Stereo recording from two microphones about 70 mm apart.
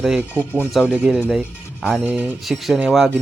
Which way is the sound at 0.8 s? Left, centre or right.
Centre.